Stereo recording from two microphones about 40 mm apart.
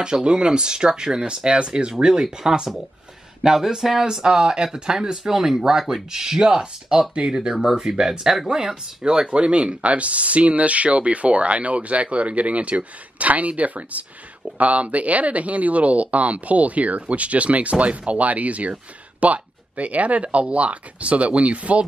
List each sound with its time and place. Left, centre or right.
0.0 s speech: right